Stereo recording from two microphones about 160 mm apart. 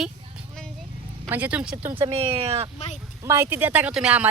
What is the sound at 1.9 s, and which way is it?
Speech, 35° right (ahead or behind).